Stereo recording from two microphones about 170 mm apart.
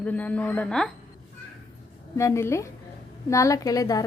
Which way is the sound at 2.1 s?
15° left (ahead or behind).